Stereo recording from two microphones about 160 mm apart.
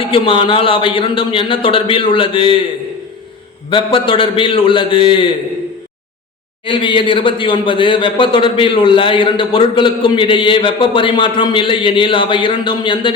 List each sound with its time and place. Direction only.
0.0 s a man's voice: 35° left (ahead or behind)
3.7 s a man's voice: 30° left (ahead or behind)
6.7 s a man's voice: 30° left (ahead or behind)